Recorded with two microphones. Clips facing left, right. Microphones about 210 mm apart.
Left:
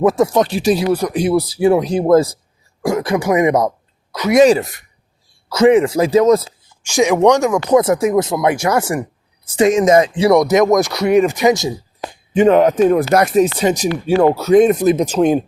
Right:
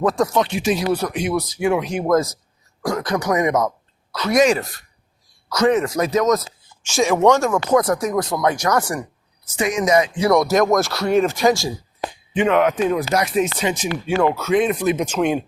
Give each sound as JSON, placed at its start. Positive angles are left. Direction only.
{"t": 0.3, "sound": "speech", "side_deg": 35}
{"t": 4.1, "sound": "speech", "side_deg": 15}
{"t": 4.4, "sound": "speech", "side_deg": 25}
{"t": 6.8, "sound": "speech", "side_deg": 15}
{"t": 9.8, "sound": "speech", "side_deg": 50}
{"t": 10.2, "sound": "speech", "side_deg": 20}
{"t": 12.3, "sound": "speech", "side_deg": 40}
{"t": 13.4, "sound": "speech", "side_deg": 35}